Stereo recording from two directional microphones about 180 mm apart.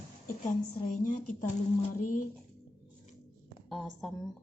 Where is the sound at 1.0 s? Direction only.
40° left (ahead or behind).